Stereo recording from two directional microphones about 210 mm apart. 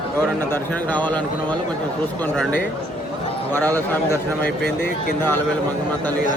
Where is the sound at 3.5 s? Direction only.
10° left (ahead or behind).